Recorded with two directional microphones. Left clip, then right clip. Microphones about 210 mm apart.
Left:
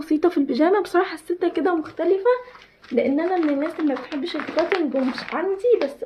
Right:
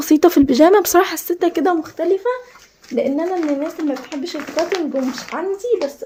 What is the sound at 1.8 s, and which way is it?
A woman's voice, 25° right (ahead or behind).